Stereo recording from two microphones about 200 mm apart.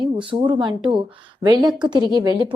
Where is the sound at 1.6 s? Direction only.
Centre (ahead or behind).